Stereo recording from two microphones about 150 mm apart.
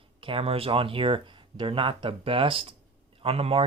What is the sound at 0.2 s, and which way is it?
Speech, 35° right (ahead or behind).